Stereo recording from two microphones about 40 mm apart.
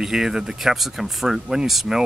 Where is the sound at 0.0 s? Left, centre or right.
Centre.